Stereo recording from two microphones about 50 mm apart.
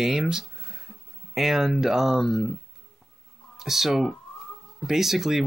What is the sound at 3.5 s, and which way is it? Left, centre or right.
Speech, centre.